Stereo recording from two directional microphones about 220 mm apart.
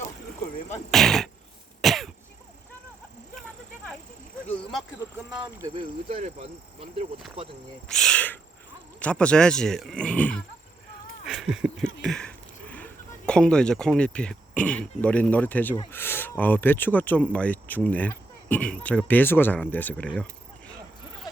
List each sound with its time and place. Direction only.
0.9 s speech: centre (ahead or behind)
1.8 s cough: centre (ahead or behind)
5.3 s speech: 15° right (ahead or behind)
7.9 s speech: centre (ahead or behind)
15.9 s a sound: 10° left (ahead or behind)
16.4 s speech: 10° left (ahead or behind)